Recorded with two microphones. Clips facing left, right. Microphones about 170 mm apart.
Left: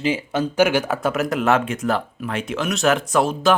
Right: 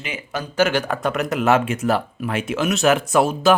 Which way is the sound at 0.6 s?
10° left (ahead or behind).